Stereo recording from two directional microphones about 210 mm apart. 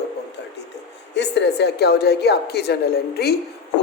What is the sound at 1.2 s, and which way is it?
A woman's voice, 55° left (ahead or behind).